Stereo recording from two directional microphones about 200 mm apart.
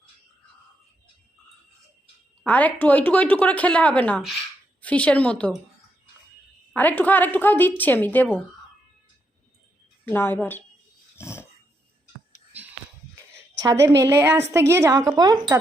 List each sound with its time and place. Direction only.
2.4 s speech: 5° left (ahead or behind)
6.7 s speech: 10° left (ahead or behind)
10.1 s speech: 10° left (ahead or behind)
11.2 s dog: 15° left (ahead or behind)
13.3 s a sound: 15° right (ahead or behind)
14.0 s a woman's voice: 10° right (ahead or behind)